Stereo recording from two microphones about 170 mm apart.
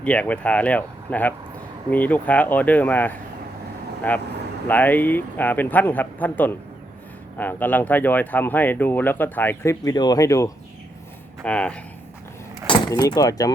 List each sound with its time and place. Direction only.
0.0 s speech: 10° left (ahead or behind)
11.4 s speech: 5° left (ahead or behind)
12.6 s speech: 25° left (ahead or behind)